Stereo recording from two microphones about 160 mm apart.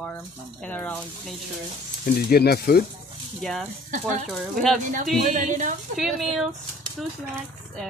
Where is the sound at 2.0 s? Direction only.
75° left (ahead or behind).